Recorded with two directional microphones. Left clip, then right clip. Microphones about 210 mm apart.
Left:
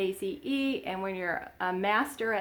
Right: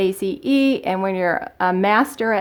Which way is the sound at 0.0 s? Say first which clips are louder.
Right 11 dB; 45° right (ahead or behind).